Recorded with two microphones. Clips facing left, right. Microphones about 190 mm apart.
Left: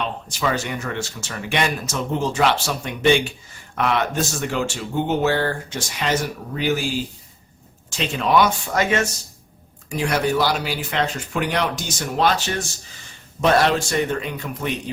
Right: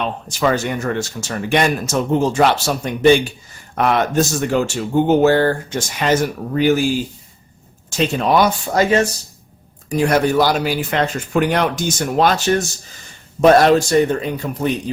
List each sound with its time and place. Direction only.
0.3 s speech: 45° right (ahead or behind)
7.9 s a man's voice: 40° right (ahead or behind)
9.9 s a man's voice: 45° right (ahead or behind)